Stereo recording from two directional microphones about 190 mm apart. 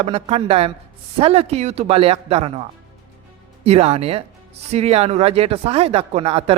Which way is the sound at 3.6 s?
35° right (ahead or behind).